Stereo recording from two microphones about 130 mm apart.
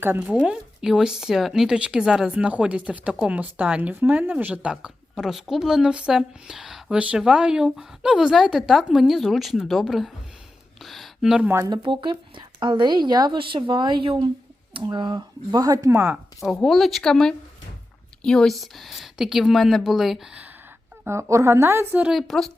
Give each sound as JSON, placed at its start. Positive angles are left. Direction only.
{"t": 0.0, "sound": "speech", "side_deg": -10}
{"t": 11.5, "sound": "speech", "side_deg": -30}
{"t": 16.6, "sound": "speech", "side_deg": 0}
{"t": 21.0, "sound": "a woman's voice", "side_deg": -20}
{"t": 22.0, "sound": "speech", "side_deg": 0}